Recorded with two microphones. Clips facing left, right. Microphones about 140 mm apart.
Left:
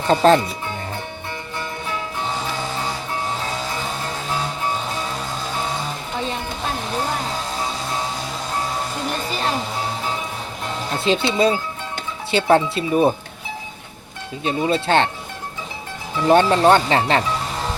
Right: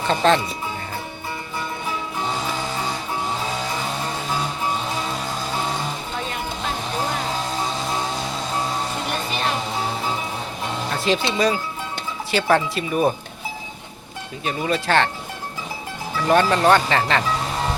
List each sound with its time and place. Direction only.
0.1 s speech: 40° left (ahead or behind)
10.9 s speech: 25° left (ahead or behind)
14.4 s speech: 25° left (ahead or behind)
16.3 s speech: 25° left (ahead or behind)